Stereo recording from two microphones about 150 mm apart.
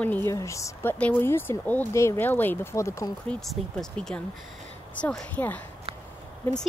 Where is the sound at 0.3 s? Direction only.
20° left (ahead or behind).